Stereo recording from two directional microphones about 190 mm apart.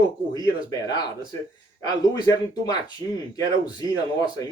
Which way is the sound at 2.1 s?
20° left (ahead or behind).